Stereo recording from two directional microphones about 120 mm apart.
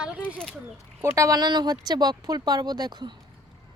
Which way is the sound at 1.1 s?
30° right (ahead or behind).